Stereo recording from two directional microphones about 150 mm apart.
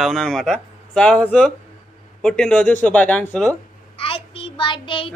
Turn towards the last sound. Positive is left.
turn(degrees=35)  # may be behind; listen again after turning